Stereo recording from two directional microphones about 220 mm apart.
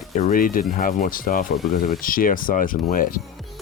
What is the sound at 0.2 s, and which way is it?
Speech, 40° left (ahead or behind).